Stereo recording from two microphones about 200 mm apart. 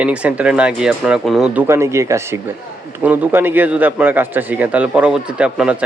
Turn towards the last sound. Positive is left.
turn(degrees=-5)  # may be behind; listen again after turning